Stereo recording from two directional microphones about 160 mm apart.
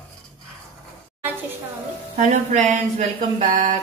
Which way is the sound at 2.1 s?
50° right (ahead or behind).